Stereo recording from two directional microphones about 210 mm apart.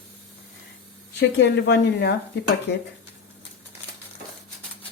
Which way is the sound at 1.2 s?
55° left (ahead or behind).